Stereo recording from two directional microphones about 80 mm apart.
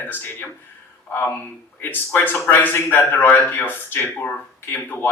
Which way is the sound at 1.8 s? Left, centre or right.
Left.